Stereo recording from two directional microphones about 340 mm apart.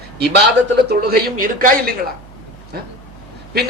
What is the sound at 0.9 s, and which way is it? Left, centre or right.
Speech, right.